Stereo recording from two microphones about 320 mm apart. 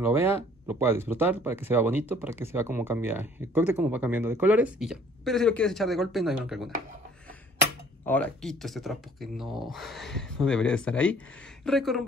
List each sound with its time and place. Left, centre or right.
0.0 s speech: centre
8.0 s speech: centre